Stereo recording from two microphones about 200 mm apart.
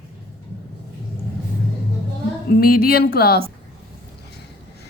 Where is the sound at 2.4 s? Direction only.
45° left (ahead or behind).